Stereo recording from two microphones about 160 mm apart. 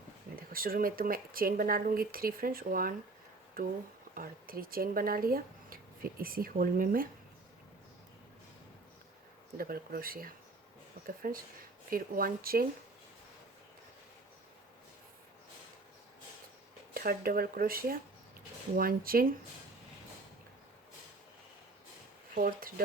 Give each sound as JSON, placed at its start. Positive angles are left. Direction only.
{"t": 0.3, "sound": "speech", "side_deg": -65}
{"t": 9.6, "sound": "speech", "side_deg": -65}
{"t": 16.9, "sound": "speech", "side_deg": -65}
{"t": 22.4, "sound": "speech", "side_deg": -65}